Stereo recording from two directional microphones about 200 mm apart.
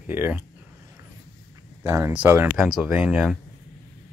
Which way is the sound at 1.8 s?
10° right (ahead or behind).